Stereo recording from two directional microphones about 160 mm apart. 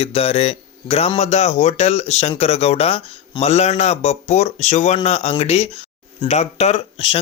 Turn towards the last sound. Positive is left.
turn(degrees=40)  # may be behind; listen again after turning